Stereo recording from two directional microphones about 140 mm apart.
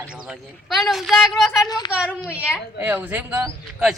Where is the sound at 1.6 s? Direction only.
30° left (ahead or behind).